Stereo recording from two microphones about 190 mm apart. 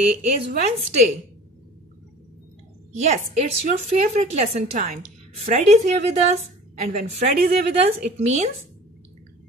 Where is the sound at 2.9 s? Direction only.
35° right (ahead or behind).